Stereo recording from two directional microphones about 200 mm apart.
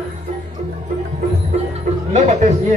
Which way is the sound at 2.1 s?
35° right (ahead or behind).